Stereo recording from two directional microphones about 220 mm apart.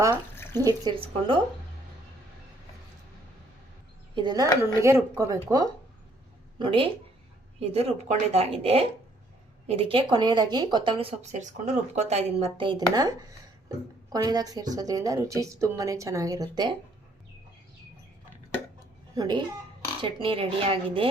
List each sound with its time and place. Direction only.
0.1 s drip: 10° left (ahead or behind)
0.6 s speech: 20° right (ahead or behind)
4.1 s a woman's voice: 20° right (ahead or behind)
19.1 s speech: 20° right (ahead or behind)